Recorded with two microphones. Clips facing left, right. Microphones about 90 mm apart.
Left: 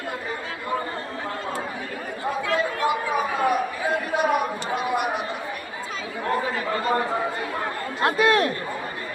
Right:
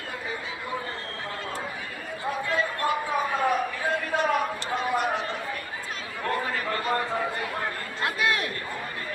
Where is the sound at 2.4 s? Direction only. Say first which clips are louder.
Left 4 dB; 90° left.